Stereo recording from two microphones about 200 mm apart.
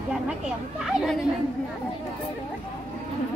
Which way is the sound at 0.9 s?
Centre (ahead or behind).